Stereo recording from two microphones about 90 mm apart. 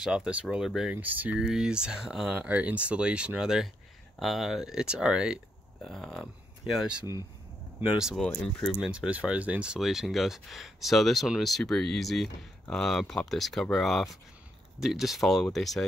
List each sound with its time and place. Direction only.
0.0 s speech: 10° right (ahead or behind)
0.9 s speech: 20° right (ahead or behind)
1.4 s speech: 5° right (ahead or behind)
5.9 s speech: centre (ahead or behind)
8.2 s speech: 10° left (ahead or behind)
8.7 s speech: 10° right (ahead or behind)